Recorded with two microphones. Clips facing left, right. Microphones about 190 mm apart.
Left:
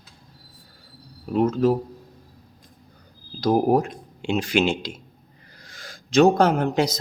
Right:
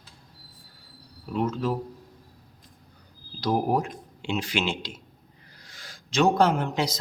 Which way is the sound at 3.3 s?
45° left (ahead or behind).